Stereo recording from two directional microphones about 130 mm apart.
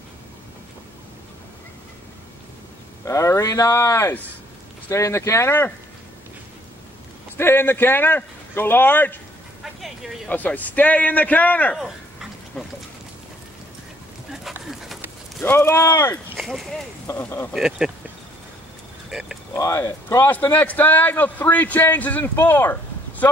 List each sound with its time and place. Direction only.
3.1 s speech: 25° left (ahead or behind)
7.3 s speech: 15° left (ahead or behind)
9.6 s vehicle: centre (ahead or behind)
10.3 s speech: 15° left (ahead or behind)
11.8 s dog: centre (ahead or behind)
14.7 s dog: centre (ahead or behind)
15.4 s speech: 20° left (ahead or behind)
16.3 s speech: centre (ahead or behind)
17.1 s speech: 20° left (ahead or behind)
17.5 s speech: centre (ahead or behind)
19.0 s a sound: 5° right (ahead or behind)
19.5 s speech: 20° left (ahead or behind)